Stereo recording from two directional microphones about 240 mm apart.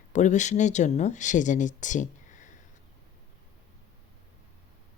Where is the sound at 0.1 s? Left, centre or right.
Left.